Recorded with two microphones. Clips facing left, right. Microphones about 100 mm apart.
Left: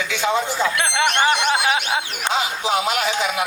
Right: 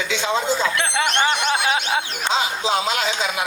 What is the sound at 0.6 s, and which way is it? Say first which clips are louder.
Speech: left 1 dB; 20° left (ahead or behind).